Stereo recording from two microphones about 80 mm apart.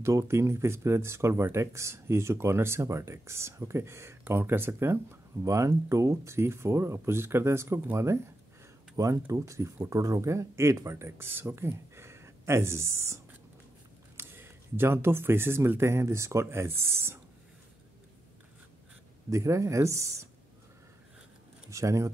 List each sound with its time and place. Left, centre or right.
0.0 s speech: right
5.4 s speech: right
8.9 s speech: right
19.3 s speech: right
21.6 s speech: right